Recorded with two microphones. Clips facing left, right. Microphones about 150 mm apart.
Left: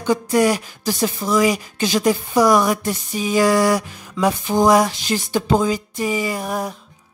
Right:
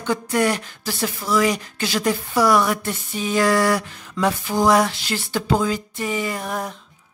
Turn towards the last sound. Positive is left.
turn(degrees=10)  # may be behind; listen again after turning